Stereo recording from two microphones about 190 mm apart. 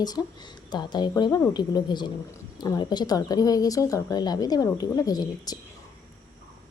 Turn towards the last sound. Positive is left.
turn(degrees=20)  # may be behind; listen again after turning